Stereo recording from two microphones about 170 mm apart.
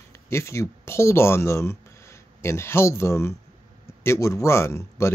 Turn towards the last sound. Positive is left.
turn(degrees=15)  # may be behind; listen again after turning